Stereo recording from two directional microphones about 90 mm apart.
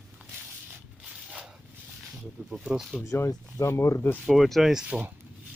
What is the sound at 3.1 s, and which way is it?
Speech, 35° left (ahead or behind).